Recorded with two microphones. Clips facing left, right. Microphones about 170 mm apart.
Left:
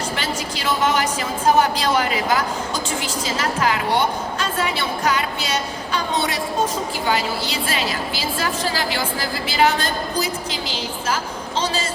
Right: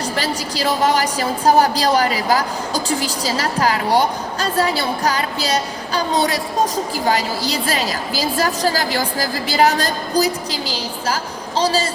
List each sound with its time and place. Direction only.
0.2 s a woman's voice: 35° right (ahead or behind)